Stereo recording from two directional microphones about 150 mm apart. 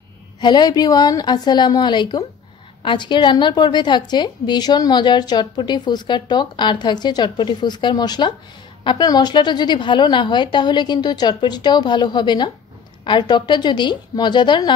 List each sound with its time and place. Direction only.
0.4 s a woman's voice: 30° left (ahead or behind)